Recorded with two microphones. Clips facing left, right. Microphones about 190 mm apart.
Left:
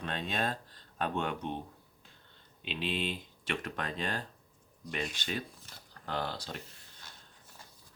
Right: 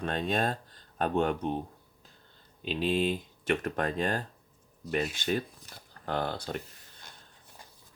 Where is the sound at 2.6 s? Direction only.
40° right (ahead or behind).